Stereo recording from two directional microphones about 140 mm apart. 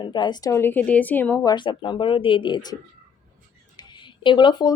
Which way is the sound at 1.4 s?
35° left (ahead or behind).